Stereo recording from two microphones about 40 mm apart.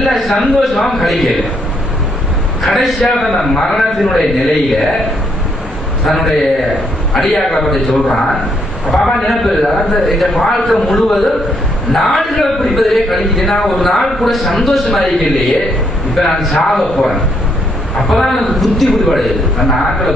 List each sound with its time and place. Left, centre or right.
0.0 s a man's voice: centre
2.6 s a man's voice: centre
6.0 s a man's voice: centre
8.9 s a man's voice: centre
9.3 s a man's voice: centre